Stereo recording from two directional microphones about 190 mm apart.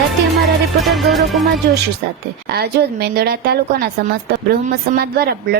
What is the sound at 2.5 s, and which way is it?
Speech, 55° right (ahead or behind).